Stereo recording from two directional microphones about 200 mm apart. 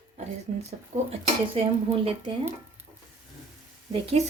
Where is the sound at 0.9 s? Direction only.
35° right (ahead or behind).